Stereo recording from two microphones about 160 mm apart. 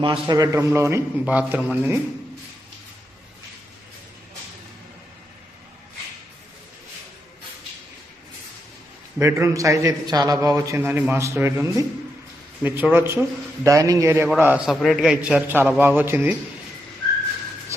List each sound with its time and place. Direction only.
0.0 s a man's voice: 30° right (ahead or behind); by 2.0 s 10° right (ahead or behind)
9.1 s a man's voice: 15° right (ahead or behind)